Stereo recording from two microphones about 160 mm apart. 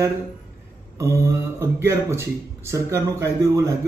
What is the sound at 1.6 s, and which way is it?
A man's voice, 15° right (ahead or behind).